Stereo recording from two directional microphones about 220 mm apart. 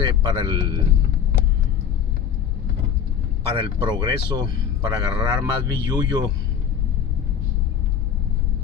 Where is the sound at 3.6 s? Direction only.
20° right (ahead or behind).